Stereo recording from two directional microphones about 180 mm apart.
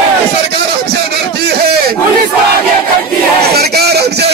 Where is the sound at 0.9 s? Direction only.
65° right (ahead or behind).